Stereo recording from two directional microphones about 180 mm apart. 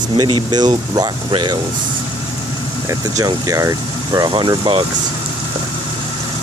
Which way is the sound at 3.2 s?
20° right (ahead or behind).